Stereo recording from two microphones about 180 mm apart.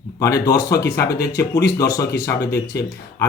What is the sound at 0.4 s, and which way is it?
Speech, 20° left (ahead or behind).